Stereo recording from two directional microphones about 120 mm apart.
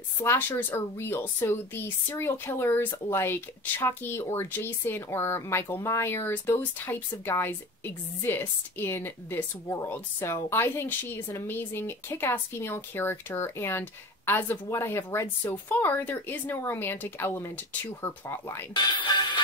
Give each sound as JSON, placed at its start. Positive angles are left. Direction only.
{"t": 0.2, "sound": "a woman's voice", "side_deg": 20}
{"t": 18.8, "sound": "music", "side_deg": 40}